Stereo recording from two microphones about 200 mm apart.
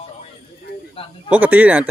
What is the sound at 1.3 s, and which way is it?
Speech, 10° right (ahead or behind).